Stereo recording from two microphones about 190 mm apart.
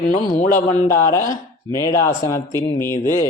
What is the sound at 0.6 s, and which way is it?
A man's voice, 15° left (ahead or behind).